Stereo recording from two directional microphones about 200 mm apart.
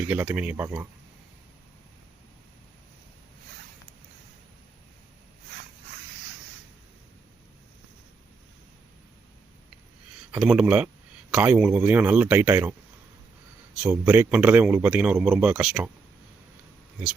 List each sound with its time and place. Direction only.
0.1 s a man's voice: 10° right (ahead or behind)
10.3 s a man's voice: 5° right (ahead or behind)
13.8 s a man's voice: 10° right (ahead or behind)